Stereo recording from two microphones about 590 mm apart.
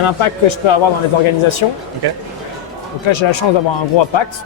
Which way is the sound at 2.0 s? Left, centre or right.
Right.